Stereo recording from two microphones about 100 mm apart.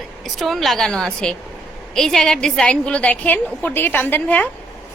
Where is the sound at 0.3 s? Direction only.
Centre (ahead or behind).